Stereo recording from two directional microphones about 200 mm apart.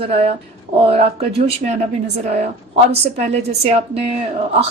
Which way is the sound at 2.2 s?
35° right (ahead or behind).